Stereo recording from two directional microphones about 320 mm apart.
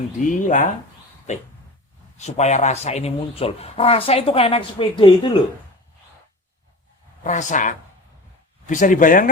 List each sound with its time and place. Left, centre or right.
0.3 s speech: left
7.3 s speech: left